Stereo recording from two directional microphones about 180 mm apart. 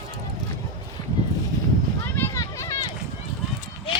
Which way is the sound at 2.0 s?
15° left (ahead or behind).